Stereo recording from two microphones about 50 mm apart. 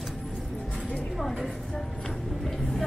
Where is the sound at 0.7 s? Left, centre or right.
Centre.